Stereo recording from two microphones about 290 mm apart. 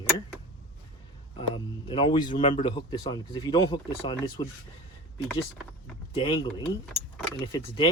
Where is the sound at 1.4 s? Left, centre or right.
Centre.